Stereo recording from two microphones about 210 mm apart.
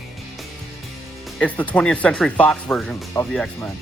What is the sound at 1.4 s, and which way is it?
Speech, 5° left (ahead or behind).